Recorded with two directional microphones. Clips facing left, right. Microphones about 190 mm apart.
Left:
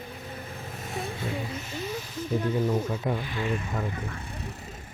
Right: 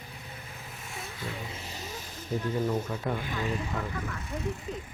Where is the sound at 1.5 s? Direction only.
35° right (ahead or behind).